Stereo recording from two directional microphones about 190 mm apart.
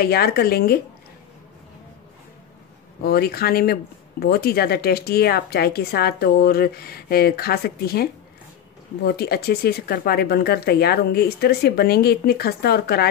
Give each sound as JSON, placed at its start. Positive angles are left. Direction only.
{"t": 0.0, "sound": "speech", "side_deg": 55}
{"t": 3.0, "sound": "speech", "side_deg": 55}